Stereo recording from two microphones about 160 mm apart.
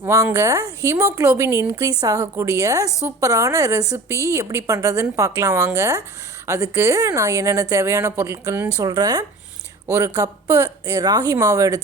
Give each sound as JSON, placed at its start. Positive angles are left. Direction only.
{"t": 0.0, "sound": "speech", "side_deg": -15}
{"t": 2.8, "sound": "a woman's voice", "side_deg": 20}
{"t": 3.2, "sound": "speech", "side_deg": -20}